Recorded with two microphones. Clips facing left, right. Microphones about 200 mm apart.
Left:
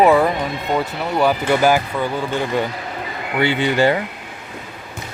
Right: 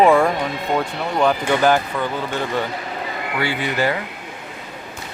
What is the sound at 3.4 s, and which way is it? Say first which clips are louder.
Speech: left 6 dB; 25° left (ahead or behind).